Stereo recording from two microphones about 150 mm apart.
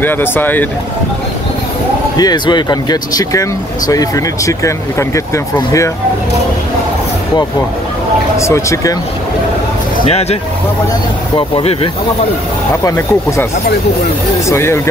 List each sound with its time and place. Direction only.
0.0 s speech: 15° left (ahead or behind)
2.1 s speech: 30° left (ahead or behind)
8.4 s speech: 20° left (ahead or behind)
11.3 s speech: 35° left (ahead or behind)
12.8 s speech: 15° left (ahead or behind)
14.5 s speech: 20° left (ahead or behind)